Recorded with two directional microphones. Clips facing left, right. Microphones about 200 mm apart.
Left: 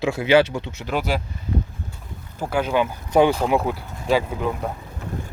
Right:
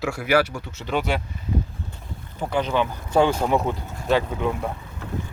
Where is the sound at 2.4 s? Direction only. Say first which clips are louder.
Left 2 dB; 5° left (ahead or behind).